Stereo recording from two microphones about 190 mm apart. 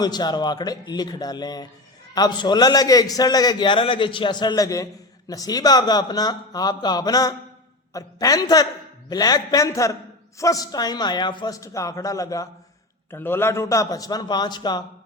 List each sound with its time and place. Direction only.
0.0 s a man's voice: 20° left (ahead or behind)